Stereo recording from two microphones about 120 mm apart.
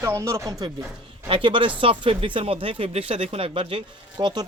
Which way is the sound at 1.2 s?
45° right (ahead or behind).